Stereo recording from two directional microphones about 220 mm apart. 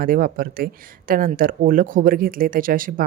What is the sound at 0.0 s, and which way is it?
Speech, 40° right (ahead or behind).